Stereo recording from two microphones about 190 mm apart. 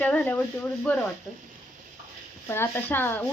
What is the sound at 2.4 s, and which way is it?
Speech, 15° left (ahead or behind).